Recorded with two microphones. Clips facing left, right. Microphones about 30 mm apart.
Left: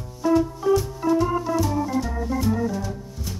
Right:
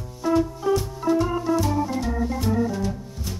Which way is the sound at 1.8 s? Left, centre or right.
Centre.